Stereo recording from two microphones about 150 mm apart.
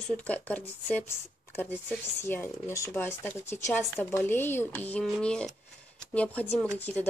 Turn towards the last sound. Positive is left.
turn(degrees=10)  # may be behind; listen again after turning